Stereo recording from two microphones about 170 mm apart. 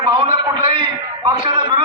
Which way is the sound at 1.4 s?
25° right (ahead or behind).